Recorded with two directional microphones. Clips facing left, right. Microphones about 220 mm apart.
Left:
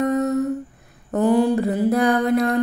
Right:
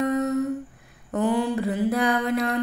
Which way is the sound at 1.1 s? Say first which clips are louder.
Left 6 dB; 40° left (ahead or behind).